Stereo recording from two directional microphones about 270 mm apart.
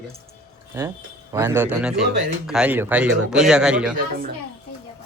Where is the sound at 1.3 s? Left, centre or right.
Centre.